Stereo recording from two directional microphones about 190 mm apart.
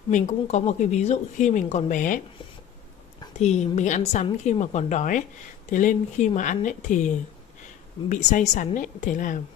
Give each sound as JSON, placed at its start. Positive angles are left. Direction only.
{"t": 0.1, "sound": "speech", "side_deg": 40}
{"t": 3.3, "sound": "speech", "side_deg": 35}
{"t": 8.1, "sound": "a woman's voice", "side_deg": 40}